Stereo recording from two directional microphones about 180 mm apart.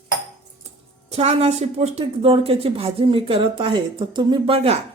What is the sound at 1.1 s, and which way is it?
Speech, 35° right (ahead or behind).